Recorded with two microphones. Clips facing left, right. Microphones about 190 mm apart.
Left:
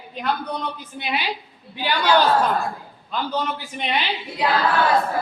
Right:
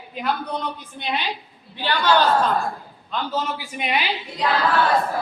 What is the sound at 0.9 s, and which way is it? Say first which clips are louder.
A woman's voice: left 1 dB; 10° left (ahead or behind).